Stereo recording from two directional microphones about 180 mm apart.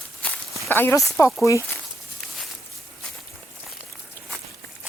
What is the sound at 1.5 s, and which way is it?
Speech, 15° left (ahead or behind).